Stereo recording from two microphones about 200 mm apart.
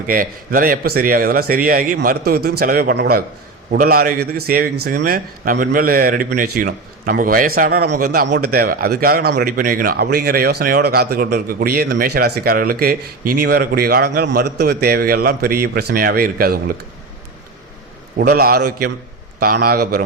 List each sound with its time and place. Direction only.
0.1 s a man's voice: 45° right (ahead or behind)
18.2 s a man's voice: 50° right (ahead or behind)